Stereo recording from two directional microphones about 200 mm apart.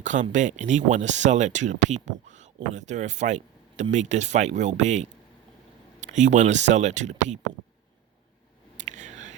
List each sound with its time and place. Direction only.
0.0 s speech: 40° right (ahead or behind)
8.8 s whispering: 35° right (ahead or behind)